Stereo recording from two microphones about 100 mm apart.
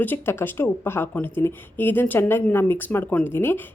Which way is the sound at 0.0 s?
20° left (ahead or behind).